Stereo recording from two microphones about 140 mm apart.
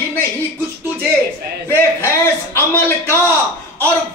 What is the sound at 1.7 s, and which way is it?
A man's voice, 15° left (ahead or behind).